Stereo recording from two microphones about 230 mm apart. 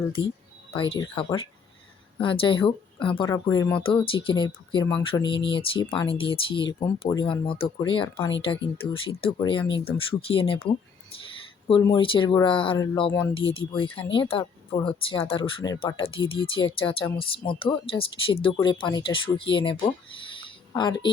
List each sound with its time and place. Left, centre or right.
0.7 s speech: left
3.8 s speech: left